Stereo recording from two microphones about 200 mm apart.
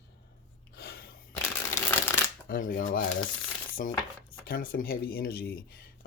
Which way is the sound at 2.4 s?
45° left (ahead or behind).